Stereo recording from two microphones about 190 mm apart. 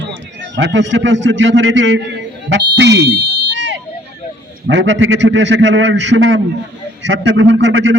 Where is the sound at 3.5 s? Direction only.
70° right (ahead or behind).